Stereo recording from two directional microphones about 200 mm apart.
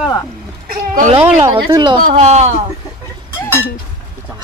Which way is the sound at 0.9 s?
35° right (ahead or behind).